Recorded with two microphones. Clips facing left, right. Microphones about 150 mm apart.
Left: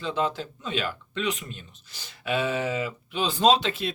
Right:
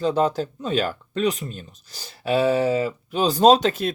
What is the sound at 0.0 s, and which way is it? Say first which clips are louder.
Speech: right 7 dB; 40° right (ahead or behind).